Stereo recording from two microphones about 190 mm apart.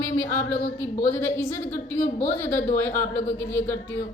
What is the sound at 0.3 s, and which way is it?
A woman's voice, 10° left (ahead or behind).